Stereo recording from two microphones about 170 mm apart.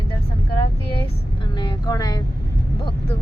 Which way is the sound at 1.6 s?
20° left (ahead or behind).